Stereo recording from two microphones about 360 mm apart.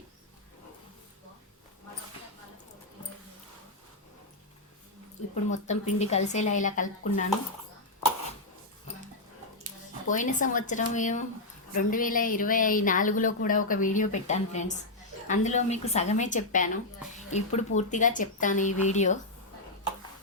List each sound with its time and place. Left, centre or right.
5.3 s speech: centre
10.1 s a woman's voice: left